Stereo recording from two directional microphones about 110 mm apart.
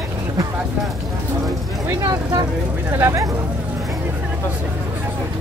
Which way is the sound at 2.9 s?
25° right (ahead or behind).